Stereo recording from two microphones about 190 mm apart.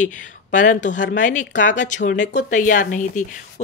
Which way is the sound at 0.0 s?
40° left (ahead or behind).